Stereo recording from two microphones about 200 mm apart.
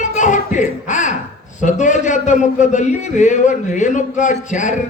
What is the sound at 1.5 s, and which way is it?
A man's voice, 40° left (ahead or behind).